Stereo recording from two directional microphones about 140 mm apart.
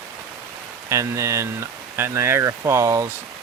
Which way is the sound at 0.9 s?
20° right (ahead or behind).